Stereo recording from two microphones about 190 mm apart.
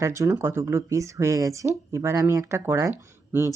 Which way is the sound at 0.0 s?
15° right (ahead or behind).